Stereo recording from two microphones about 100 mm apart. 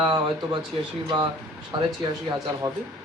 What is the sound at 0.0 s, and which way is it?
Speech, 50° right (ahead or behind).